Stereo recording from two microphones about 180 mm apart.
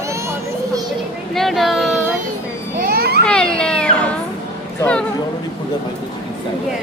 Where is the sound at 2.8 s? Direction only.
55° right (ahead or behind).